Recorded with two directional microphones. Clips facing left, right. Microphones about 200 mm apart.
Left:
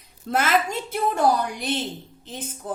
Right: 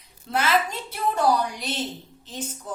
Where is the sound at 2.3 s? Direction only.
55° left (ahead or behind).